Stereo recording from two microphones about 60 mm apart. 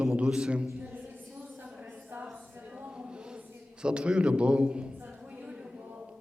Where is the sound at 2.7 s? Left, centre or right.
Centre.